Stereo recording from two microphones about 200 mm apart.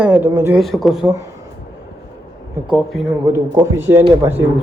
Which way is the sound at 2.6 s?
Centre (ahead or behind).